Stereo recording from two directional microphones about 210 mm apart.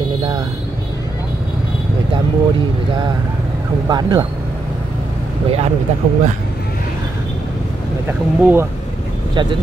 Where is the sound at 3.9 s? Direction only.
20° right (ahead or behind).